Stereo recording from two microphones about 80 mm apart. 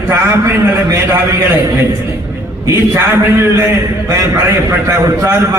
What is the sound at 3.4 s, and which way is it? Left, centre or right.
Speech, right.